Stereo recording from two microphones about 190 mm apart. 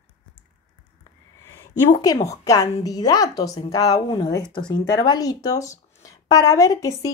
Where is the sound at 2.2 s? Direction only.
15° left (ahead or behind).